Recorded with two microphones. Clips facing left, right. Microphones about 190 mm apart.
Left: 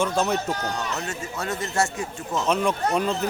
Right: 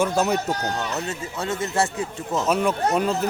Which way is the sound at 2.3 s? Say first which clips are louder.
Right 1 dB; 5° right (ahead or behind).